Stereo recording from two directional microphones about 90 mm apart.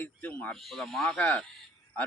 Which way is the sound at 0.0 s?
20° left (ahead or behind).